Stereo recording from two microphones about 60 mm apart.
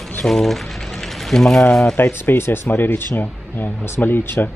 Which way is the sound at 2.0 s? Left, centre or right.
Left.